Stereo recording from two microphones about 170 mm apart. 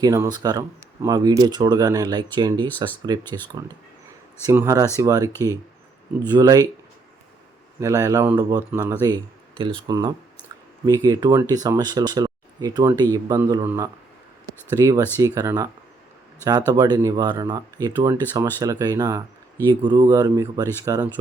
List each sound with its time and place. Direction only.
0.0 s speech: 20° right (ahead or behind)
6.3 s speech: 25° right (ahead or behind)
7.8 s speech: 20° right (ahead or behind)
14.4 s a sound: 20° right (ahead or behind)
15.4 s speech: 20° right (ahead or behind)